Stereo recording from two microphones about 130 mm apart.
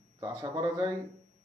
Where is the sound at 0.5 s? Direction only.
35° right (ahead or behind).